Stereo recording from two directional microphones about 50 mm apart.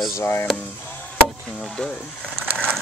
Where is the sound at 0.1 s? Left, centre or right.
Left.